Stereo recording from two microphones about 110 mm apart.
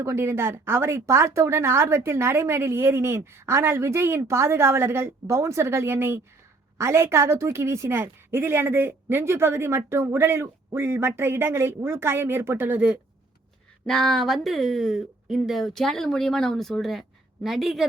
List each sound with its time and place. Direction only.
0.0 s speech: 25° right (ahead or behind)
13.8 s speech: 5° left (ahead or behind)